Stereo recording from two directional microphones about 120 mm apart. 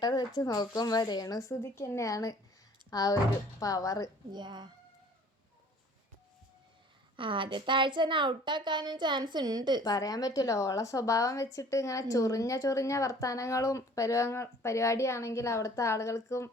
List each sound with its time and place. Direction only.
0.0 s a woman's voice: 35° left (ahead or behind)
4.3 s a woman's voice: 35° right (ahead or behind)
7.2 s a woman's voice: 45° right (ahead or behind)
9.8 s a woman's voice: 30° left (ahead or behind)